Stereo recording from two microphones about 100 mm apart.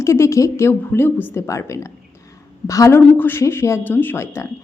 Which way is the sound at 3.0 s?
20° left (ahead or behind).